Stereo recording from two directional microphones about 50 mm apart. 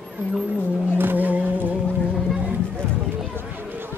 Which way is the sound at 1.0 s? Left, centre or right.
Right.